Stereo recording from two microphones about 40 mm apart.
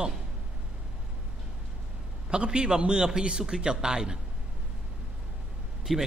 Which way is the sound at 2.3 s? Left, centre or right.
Right.